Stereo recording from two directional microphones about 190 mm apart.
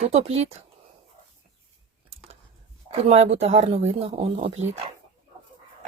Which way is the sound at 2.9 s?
35° right (ahead or behind).